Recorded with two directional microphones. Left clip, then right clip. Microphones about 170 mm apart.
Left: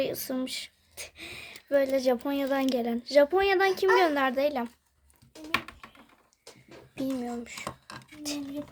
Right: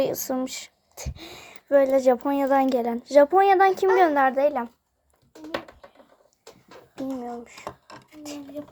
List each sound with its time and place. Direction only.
0.0 s speech: 10° right (ahead or behind)
7.2 s speech: 15° left (ahead or behind)